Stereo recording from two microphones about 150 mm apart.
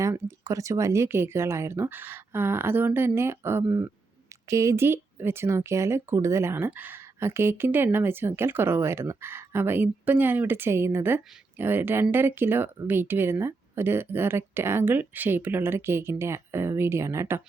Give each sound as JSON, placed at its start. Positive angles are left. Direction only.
{"t": 0.0, "sound": "speech", "side_deg": -20}